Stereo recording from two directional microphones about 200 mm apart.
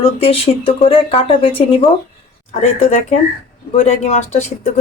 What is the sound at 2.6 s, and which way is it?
Speech, 35° left (ahead or behind).